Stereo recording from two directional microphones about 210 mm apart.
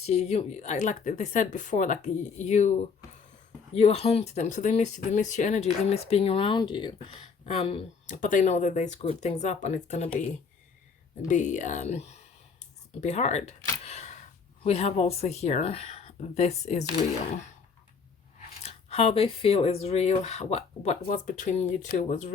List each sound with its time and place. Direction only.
0.0 s speech: 30° left (ahead or behind)
11.3 s speech: 35° left (ahead or behind)
18.6 s speech: 30° left (ahead or behind)